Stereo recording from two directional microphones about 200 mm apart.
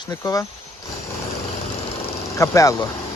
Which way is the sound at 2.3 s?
15° left (ahead or behind).